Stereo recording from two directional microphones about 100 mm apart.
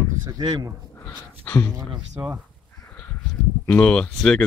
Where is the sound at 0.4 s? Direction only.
45° right (ahead or behind).